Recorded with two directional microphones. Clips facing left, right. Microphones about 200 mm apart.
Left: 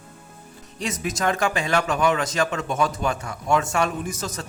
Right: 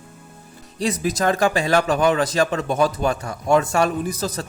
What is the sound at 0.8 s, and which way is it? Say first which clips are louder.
Speech: right 5 dB; 35° right (ahead or behind).